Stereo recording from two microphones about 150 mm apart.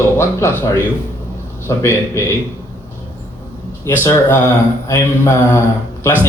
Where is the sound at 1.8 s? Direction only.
20° left (ahead or behind).